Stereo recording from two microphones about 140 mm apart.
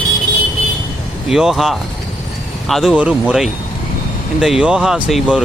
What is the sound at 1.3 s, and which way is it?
Speech, centre (ahead or behind).